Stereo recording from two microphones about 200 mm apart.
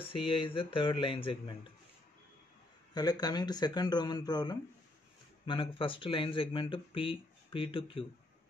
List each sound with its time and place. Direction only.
0.1 s speech: 25° left (ahead or behind)
2.9 s speech: 20° left (ahead or behind)